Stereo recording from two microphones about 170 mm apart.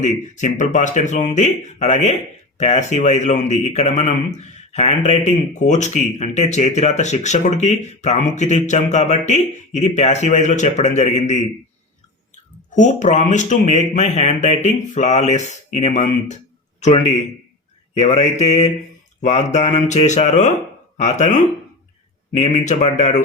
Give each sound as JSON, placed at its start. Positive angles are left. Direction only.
{"t": 0.0, "sound": "speech", "side_deg": 45}
{"t": 12.7, "sound": "speech", "side_deg": 45}
{"t": 16.8, "sound": "mantra", "side_deg": 40}
{"t": 18.1, "sound": "mantra", "side_deg": 40}
{"t": 19.2, "sound": "speech", "side_deg": 40}